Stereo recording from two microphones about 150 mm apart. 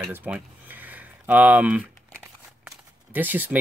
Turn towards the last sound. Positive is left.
turn(degrees=-10)  # may be behind; listen again after turning